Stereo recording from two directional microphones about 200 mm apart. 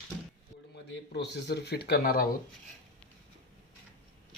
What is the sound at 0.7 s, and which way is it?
Speech, 60° left (ahead or behind).